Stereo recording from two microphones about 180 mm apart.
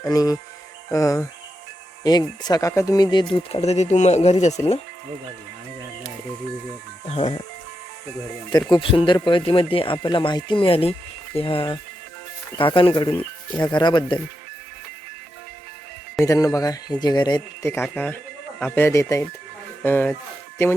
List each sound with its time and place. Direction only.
0.0 s speech: 20° left (ahead or behind); by 4.8 s 35° left (ahead or behind)
7.1 s speech: 35° left (ahead or behind)
8.7 s speech: 30° left (ahead or behind)
16.2 s speech: 20° left (ahead or behind)